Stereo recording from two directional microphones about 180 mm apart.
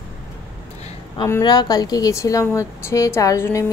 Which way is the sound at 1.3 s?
20° left (ahead or behind).